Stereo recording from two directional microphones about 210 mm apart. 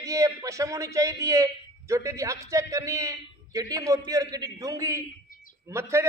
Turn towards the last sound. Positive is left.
turn(degrees=-15)  # may be behind; listen again after turning